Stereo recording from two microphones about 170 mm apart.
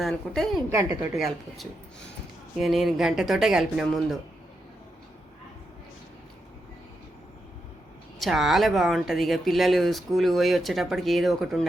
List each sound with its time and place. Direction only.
0.0 s speech: 5° left (ahead or behind)
0.7 s a woman's voice: 15° right (ahead or behind)
1.1 s speech: centre (ahead or behind)
8.2 s speech: centre (ahead or behind)